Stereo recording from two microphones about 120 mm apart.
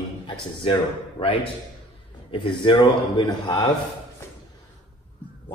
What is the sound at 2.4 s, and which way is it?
A man's voice, 45° left (ahead or behind).